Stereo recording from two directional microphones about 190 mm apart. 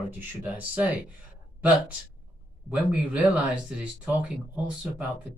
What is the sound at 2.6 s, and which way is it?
Speech, 5° right (ahead or behind).